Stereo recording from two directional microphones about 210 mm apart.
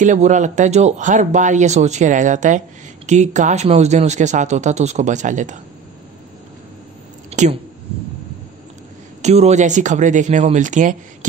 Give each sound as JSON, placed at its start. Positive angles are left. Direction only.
{"t": 0.0, "sound": "speech", "side_deg": -35}
{"t": 7.2, "sound": "a sound", "side_deg": -35}
{"t": 9.2, "sound": "speech", "side_deg": -30}